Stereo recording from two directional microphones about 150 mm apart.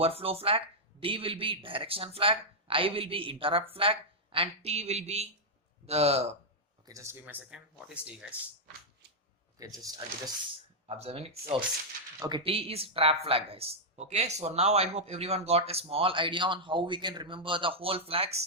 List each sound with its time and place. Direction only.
0.0 s speech: 40° right (ahead or behind)
6.8 s speech: 20° right (ahead or behind)
9.6 s speech: 25° right (ahead or behind)
10.8 s speech: 45° right (ahead or behind)